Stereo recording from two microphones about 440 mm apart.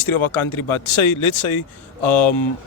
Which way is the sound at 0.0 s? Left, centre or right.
Left.